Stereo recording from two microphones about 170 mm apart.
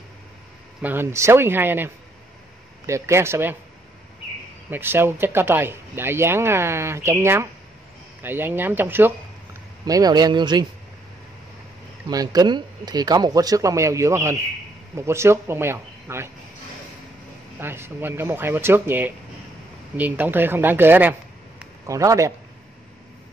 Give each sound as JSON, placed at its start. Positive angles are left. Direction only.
{"t": 0.8, "sound": "speech", "side_deg": -15}
{"t": 2.9, "sound": "speech", "side_deg": -15}
{"t": 4.6, "sound": "speech", "side_deg": -10}
{"t": 12.1, "sound": "speech", "side_deg": -20}
{"t": 17.6, "sound": "speech", "side_deg": -15}